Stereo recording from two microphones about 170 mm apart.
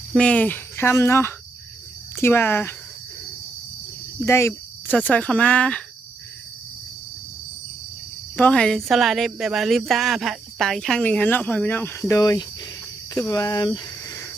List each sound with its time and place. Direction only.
0.1 s speech: 5° left (ahead or behind)
4.3 s speech: 15° left (ahead or behind)
8.4 s speech: 5° left (ahead or behind)